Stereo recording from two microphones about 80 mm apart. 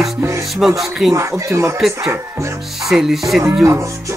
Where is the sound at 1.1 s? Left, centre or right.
Right.